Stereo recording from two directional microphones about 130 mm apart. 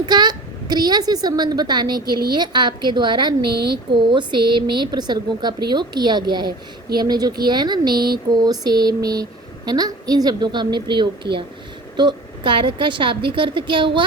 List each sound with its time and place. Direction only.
0.0 s a woman's voice: 35° right (ahead or behind)